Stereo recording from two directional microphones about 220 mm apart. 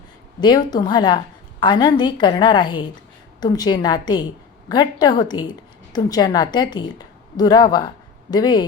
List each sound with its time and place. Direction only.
0.4 s a woman's voice: 20° left (ahead or behind)